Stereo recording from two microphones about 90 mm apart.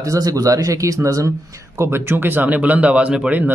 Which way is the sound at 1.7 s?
30° right (ahead or behind).